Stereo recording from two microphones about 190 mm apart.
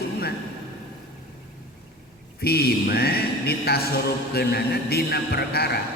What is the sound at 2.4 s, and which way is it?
A man's voice, 55° left (ahead or behind).